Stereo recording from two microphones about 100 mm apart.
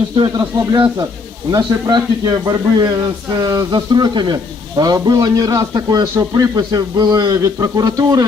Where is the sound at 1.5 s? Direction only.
40° right (ahead or behind).